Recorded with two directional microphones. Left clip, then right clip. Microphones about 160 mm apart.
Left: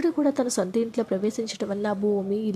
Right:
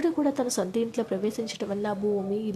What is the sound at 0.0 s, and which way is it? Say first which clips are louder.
Speech: left 2 dB; 20° left (ahead or behind).